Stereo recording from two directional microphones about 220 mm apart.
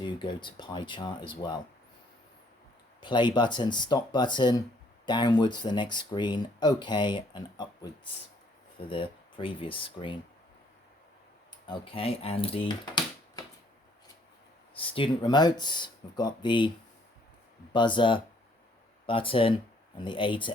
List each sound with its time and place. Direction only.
0.0 s speech: 20° left (ahead or behind)
3.0 s speech: 20° left (ahead or behind)
11.7 s speech: 25° left (ahead or behind)
14.8 s speech: 25° left (ahead or behind)
17.7 s speech: 20° left (ahead or behind)